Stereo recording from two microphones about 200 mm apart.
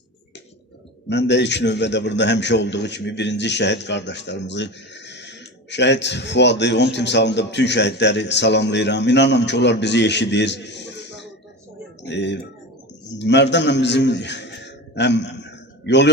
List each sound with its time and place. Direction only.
1.0 s a man's voice: 60° left (ahead or behind)